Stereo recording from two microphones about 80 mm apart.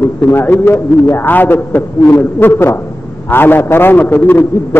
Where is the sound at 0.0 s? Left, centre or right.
Left.